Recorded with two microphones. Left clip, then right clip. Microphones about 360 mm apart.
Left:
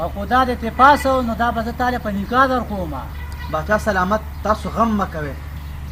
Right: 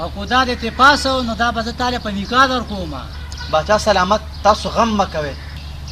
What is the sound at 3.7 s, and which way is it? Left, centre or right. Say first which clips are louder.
Speech: right 3 dB; centre.